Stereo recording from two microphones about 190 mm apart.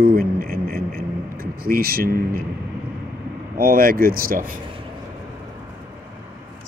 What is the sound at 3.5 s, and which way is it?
Speech, 50° right (ahead or behind).